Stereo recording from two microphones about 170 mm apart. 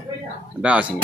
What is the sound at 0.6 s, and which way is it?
Speech, 5° right (ahead or behind).